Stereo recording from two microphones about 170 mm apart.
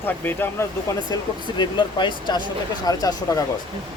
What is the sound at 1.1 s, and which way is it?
Speech, 25° left (ahead or behind).